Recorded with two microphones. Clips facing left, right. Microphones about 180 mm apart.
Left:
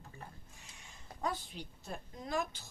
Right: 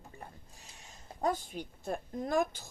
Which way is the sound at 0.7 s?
45° right (ahead or behind).